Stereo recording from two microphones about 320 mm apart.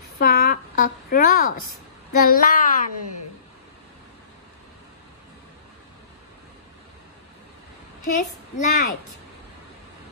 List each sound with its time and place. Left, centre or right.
0.2 s a sound: left
2.1 s speech: left
8.5 s speech: left